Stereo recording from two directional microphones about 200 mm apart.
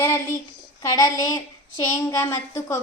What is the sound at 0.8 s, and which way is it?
A woman's voice, 15° left (ahead or behind).